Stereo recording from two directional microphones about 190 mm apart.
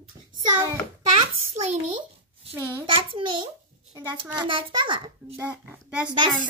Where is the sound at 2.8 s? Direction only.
25° right (ahead or behind).